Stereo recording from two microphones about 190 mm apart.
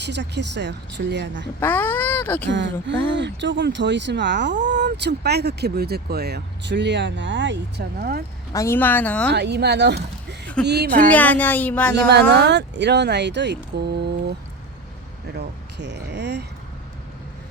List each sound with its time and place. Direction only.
0.0 s speech: 65° right (ahead or behind)
1.5 s speech: 10° left (ahead or behind)
2.5 s speech: 75° right (ahead or behind); by 8.2 s 55° right (ahead or behind)
8.5 s speech: 15° left (ahead or behind)
9.3 s speech: 60° right (ahead or behind)
11.1 s speech: 10° left (ahead or behind)
12.3 s speech: 65° right (ahead or behind)
15.4 s speech: 65° right (ahead or behind)